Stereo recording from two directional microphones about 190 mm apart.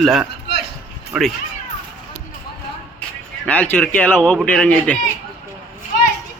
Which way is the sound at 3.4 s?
5° left (ahead or behind).